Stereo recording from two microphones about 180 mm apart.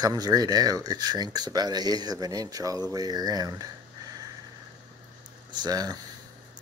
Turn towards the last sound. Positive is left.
turn(degrees=-20)  # may be behind; listen again after turning